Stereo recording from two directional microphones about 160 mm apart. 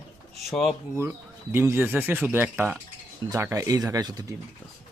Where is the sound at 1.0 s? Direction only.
15° right (ahead or behind).